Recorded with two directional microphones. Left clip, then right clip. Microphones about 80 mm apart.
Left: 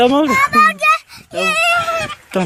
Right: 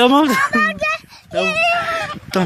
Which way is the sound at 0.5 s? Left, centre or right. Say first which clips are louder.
Left 6 dB; centre.